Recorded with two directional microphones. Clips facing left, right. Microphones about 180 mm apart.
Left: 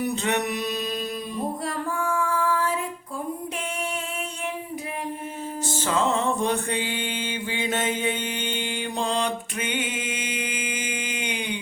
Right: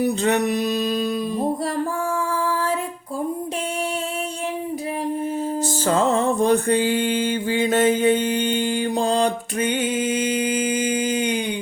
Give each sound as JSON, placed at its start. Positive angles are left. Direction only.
{"t": 0.0, "sound": "music", "side_deg": -35}
{"t": 5.8, "sound": "mantra", "side_deg": -40}